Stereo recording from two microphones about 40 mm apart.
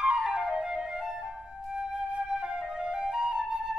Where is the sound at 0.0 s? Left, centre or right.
Centre.